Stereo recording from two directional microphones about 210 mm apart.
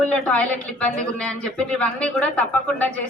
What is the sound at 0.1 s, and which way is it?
A woman's voice, 5° left (ahead or behind).